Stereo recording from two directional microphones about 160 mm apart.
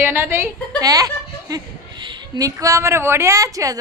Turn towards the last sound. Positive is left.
turn(degrees=-20)  # may be behind; listen again after turning